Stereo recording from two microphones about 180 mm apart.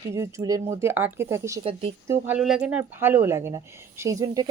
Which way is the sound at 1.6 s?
30° right (ahead or behind).